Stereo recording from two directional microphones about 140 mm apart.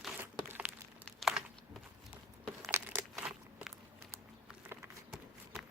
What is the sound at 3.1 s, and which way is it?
Crunch, 5° right (ahead or behind).